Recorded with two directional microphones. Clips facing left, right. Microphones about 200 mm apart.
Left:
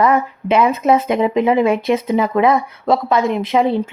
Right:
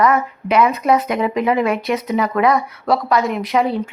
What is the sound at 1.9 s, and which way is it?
Speech, 25° left (ahead or behind).